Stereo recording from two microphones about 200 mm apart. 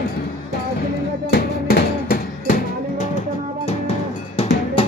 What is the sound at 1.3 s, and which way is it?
Music, 50° left (ahead or behind).